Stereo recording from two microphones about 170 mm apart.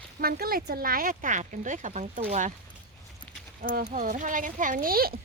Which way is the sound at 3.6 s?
55° right (ahead or behind).